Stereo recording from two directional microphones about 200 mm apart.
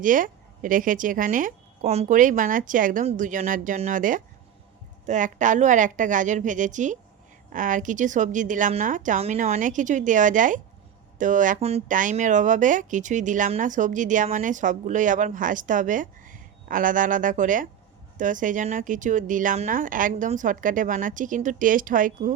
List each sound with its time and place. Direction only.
0.0 s speech: 40° right (ahead or behind)